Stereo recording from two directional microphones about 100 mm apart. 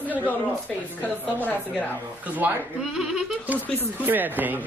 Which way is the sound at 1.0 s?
15° left (ahead or behind).